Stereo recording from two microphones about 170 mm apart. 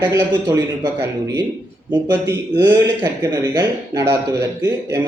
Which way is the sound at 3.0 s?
20° right (ahead or behind).